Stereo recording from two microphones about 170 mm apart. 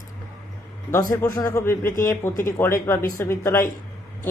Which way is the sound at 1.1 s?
20° left (ahead or behind).